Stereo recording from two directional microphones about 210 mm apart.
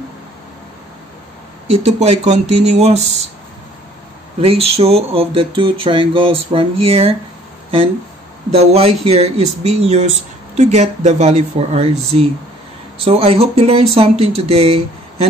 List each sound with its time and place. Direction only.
1.7 s speech: 30° right (ahead or behind)
4.5 s speech: 30° right (ahead or behind)
8.5 s speech: 30° right (ahead or behind)